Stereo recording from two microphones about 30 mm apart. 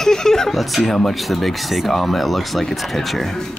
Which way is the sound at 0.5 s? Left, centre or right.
Centre.